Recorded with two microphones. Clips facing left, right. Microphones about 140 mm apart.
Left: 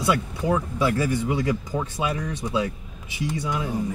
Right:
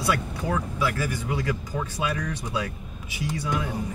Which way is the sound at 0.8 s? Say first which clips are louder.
Left 5 dB; 25° left (ahead or behind).